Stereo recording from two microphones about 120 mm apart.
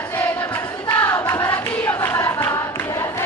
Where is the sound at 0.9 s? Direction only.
20° left (ahead or behind).